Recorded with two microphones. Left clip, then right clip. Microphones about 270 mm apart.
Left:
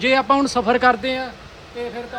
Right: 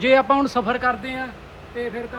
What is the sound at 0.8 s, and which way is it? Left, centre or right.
Speech, left.